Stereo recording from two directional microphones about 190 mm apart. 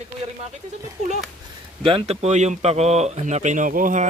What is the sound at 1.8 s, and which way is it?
Speech, 30° right (ahead or behind).